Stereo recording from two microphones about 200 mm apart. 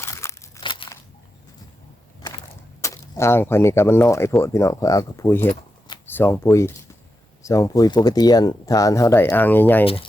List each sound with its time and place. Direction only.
0.0 s crumpling: 15° left (ahead or behind)
0.6 s crunch: 25° left (ahead or behind)
2.8 s speech: 15° left (ahead or behind)
9.8 s speech: 30° left (ahead or behind)